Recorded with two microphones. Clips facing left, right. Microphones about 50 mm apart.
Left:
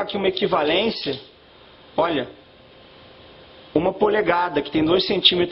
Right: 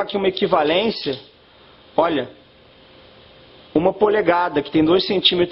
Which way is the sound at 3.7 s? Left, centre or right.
Centre.